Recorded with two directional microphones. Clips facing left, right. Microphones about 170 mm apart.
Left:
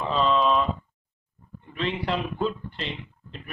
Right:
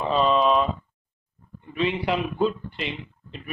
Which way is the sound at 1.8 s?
10° right (ahead or behind).